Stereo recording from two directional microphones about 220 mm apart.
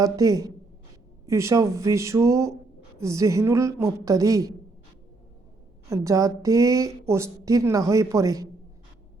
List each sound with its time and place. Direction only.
0.0 s a woman's voice: 15° right (ahead or behind)
5.9 s a woman's voice: 15° right (ahead or behind)